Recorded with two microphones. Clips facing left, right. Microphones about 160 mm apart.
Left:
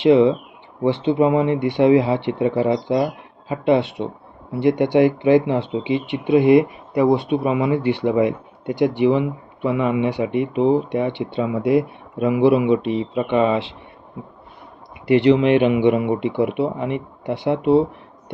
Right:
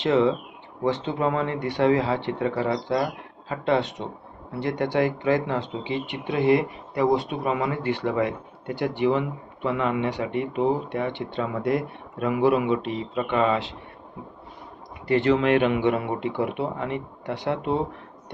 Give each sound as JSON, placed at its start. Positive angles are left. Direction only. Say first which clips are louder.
{"t": 0.0, "sound": "speech", "louder": "left 7 dB", "side_deg": 15}
{"t": 4.6, "sound": "speech", "louder": "left 8 dB", "side_deg": 15}
{"t": 15.0, "sound": "speech", "louder": "left 6 dB", "side_deg": 15}